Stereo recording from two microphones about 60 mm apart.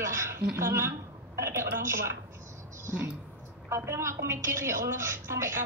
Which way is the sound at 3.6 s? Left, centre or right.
Right.